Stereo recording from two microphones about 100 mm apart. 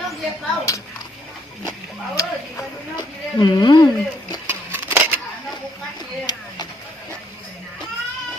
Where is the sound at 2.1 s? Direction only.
35° left (ahead or behind).